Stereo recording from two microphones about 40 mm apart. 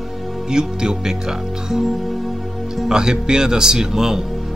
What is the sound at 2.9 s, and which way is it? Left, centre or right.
Speech, centre.